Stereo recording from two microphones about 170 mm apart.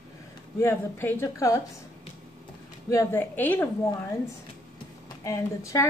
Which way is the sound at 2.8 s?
15° left (ahead or behind).